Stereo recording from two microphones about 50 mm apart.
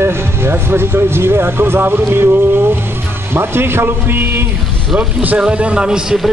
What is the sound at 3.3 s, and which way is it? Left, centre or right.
Speech, right.